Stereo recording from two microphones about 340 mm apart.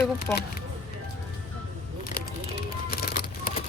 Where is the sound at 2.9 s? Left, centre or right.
Left.